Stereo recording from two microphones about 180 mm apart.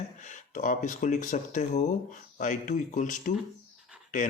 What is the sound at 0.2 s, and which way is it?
Speech, 40° left (ahead or behind).